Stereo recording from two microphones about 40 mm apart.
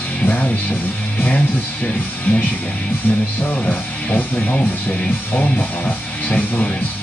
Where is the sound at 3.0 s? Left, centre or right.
Left.